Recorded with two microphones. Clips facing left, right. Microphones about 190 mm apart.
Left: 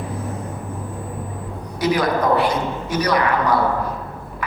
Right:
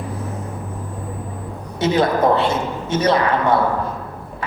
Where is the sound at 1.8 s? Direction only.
25° right (ahead or behind).